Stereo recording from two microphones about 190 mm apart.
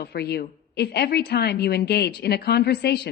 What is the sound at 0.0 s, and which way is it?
A woman's voice, 60° left (ahead or behind).